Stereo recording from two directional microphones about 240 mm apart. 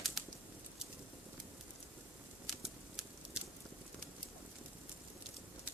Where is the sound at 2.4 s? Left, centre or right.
Centre.